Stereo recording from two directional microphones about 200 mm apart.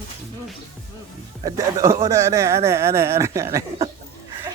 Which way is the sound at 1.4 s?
20° right (ahead or behind).